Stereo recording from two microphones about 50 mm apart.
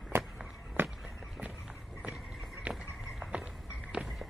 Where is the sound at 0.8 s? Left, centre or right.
Right.